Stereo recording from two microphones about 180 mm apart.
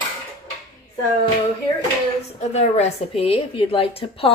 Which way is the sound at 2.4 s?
35° left (ahead or behind).